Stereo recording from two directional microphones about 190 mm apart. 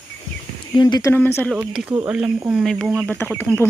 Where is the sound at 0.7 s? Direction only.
20° left (ahead or behind).